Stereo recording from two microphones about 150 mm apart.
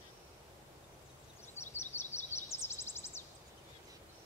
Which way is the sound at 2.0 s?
15° left (ahead or behind).